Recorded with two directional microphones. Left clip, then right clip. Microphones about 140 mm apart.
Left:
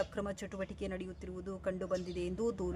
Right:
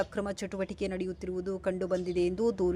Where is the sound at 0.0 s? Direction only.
25° right (ahead or behind).